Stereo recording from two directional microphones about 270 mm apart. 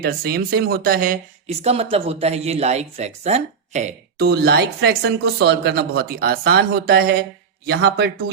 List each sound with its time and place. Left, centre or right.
0.0 s speech: right